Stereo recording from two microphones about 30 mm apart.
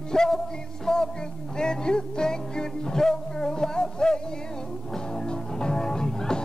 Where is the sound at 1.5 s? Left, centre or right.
Left.